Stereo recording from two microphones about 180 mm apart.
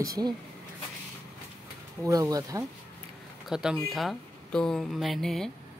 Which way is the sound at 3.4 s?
5° right (ahead or behind).